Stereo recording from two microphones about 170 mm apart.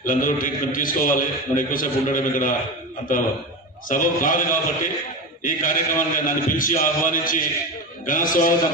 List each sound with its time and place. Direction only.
0.0 s a man's voice: 50° left (ahead or behind)
3.8 s a man's voice: 50° left (ahead or behind)